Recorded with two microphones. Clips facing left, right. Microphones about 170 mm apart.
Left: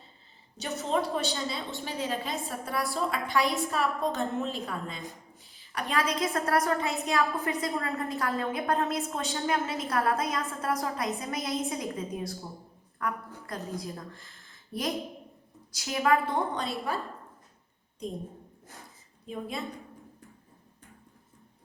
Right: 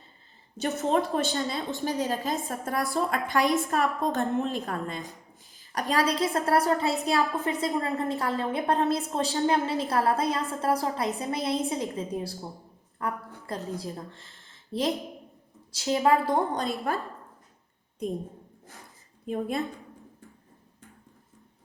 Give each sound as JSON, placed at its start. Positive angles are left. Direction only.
{"t": 0.5, "sound": "a woman's voice", "side_deg": -50}
{"t": 5.5, "sound": "a woman's voice", "side_deg": -40}
{"t": 19.3, "sound": "a woman's voice", "side_deg": -55}